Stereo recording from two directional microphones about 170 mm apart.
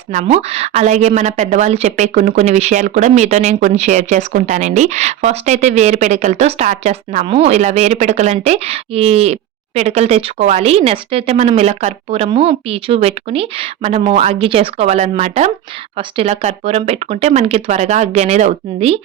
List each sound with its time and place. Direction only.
0.1 s a woman's voice: 40° right (ahead or behind)